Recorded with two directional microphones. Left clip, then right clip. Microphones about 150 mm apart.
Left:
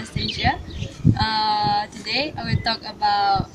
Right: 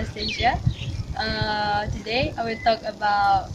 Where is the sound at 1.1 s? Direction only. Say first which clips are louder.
Left 4 dB; 15° right (ahead or behind).